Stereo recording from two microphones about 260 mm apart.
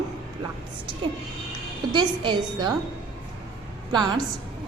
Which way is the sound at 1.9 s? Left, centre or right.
Centre.